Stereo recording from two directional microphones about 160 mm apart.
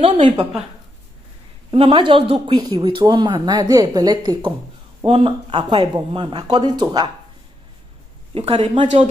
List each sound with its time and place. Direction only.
0.0 s speech: 35° right (ahead or behind)
1.7 s speech: 35° right (ahead or behind)
8.4 s speech: 40° right (ahead or behind)